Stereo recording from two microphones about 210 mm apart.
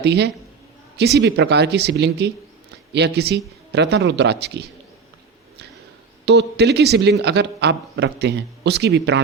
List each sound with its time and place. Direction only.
0.0 s a man's voice: 55° right (ahead or behind)
6.2 s a man's voice: 55° right (ahead or behind)